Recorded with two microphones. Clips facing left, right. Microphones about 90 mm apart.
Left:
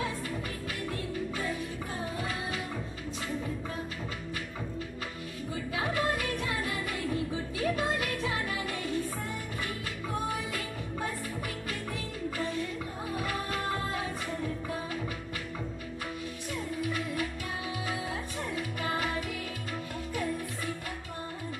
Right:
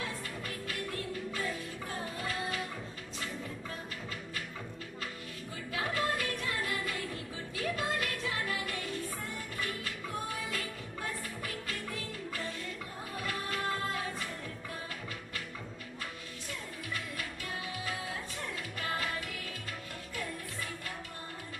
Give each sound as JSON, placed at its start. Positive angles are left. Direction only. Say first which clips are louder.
{"t": 0.7, "sound": "music", "louder": "left 1 dB", "side_deg": 20}
{"t": 5.7, "sound": "music", "louder": "left 2 dB", "side_deg": 20}
{"t": 16.8, "sound": "music", "louder": "left 7 dB", "side_deg": 20}
{"t": 18.5, "sound": "music", "louder": "left 5 dB", "side_deg": 20}